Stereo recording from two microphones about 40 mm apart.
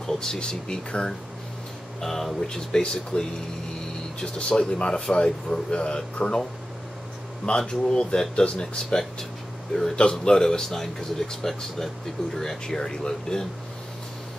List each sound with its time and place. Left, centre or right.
0.0 s speech: centre
2.0 s speech: centre
7.4 s speech: left